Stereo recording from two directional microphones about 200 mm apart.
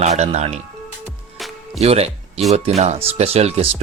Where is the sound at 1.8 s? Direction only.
30° right (ahead or behind).